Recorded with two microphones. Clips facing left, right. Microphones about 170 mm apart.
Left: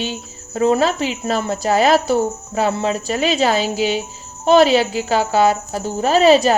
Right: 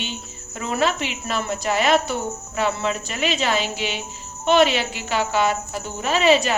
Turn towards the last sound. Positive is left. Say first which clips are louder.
# left 6 dB
turn(degrees=35)  # may be behind; listen again after turning